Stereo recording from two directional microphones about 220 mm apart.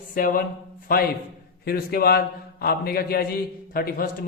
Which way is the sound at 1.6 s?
45° left (ahead or behind).